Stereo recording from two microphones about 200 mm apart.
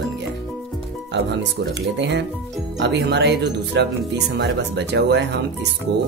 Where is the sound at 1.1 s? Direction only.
60° right (ahead or behind).